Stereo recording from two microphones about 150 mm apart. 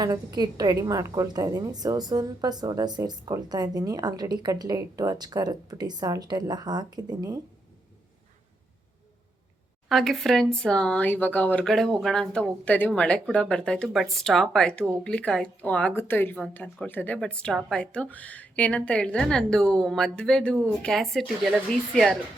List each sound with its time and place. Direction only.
0.0 s a woman's voice: 25° right (ahead or behind)
9.9 s speech: centre (ahead or behind)